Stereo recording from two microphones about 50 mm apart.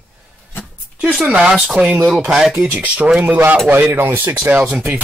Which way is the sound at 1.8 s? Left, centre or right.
Right.